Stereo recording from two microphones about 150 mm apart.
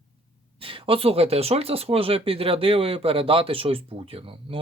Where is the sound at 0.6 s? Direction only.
35° right (ahead or behind).